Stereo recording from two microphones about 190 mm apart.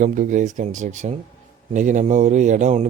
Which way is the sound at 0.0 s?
40° right (ahead or behind).